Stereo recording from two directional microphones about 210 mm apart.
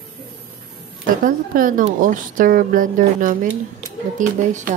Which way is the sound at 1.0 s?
40° right (ahead or behind).